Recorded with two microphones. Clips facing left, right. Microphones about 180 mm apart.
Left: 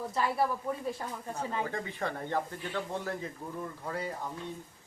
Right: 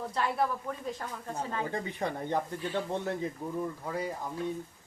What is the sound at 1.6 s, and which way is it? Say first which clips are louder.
Speech: right 2 dB; 20° right (ahead or behind).